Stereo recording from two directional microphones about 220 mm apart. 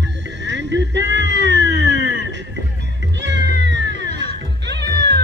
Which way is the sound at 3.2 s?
55° right (ahead or behind).